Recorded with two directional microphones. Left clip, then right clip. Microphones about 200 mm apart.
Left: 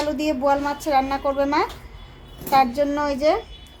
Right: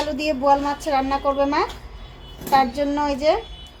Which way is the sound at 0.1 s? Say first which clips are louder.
Right 3 dB; 25° left (ahead or behind).